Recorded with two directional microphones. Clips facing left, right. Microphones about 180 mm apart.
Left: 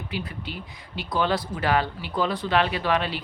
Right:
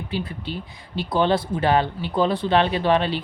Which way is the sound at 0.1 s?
30° right (ahead or behind).